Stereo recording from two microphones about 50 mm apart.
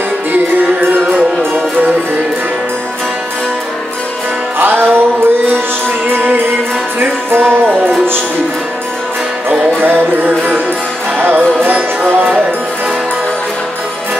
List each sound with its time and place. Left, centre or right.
4.6 s music: right
9.8 s music: right